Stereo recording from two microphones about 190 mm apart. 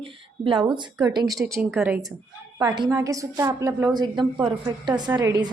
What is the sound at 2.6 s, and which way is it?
A woman's voice, 20° right (ahead or behind).